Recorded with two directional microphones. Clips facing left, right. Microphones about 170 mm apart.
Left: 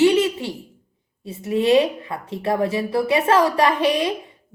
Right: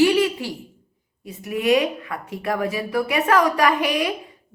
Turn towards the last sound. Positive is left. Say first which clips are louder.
# left 2 dB
turn(degrees=25)  # may be behind; listen again after turning